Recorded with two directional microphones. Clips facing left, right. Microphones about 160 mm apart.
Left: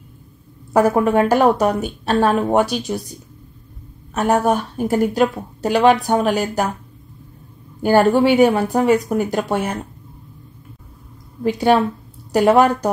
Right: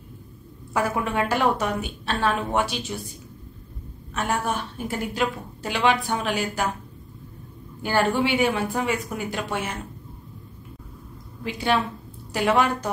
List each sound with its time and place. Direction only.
0.7 s a woman's voice: 45° left (ahead or behind)
4.1 s a woman's voice: 40° left (ahead or behind)
7.8 s a woman's voice: 40° left (ahead or behind)
11.4 s a woman's voice: 45° left (ahead or behind)